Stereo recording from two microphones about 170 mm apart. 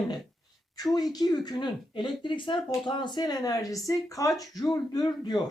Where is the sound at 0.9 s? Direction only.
20° left (ahead or behind).